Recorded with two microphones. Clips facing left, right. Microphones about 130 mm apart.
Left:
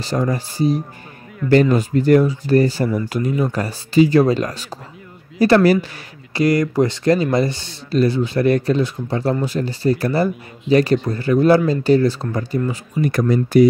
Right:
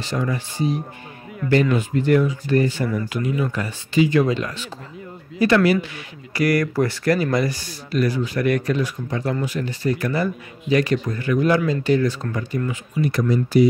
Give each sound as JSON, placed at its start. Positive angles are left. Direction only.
{"t": 0.0, "sound": "speech", "side_deg": 35}
{"t": 6.3, "sound": "speech", "side_deg": 25}
{"t": 13.0, "sound": "speech", "side_deg": 50}